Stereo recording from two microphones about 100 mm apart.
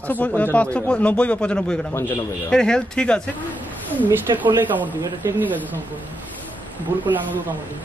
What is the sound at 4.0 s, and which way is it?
Speech, 15° right (ahead or behind).